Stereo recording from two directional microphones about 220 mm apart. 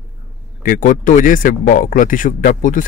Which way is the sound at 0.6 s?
40° left (ahead or behind).